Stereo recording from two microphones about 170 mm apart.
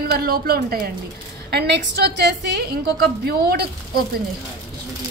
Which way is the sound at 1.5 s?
75° right (ahead or behind).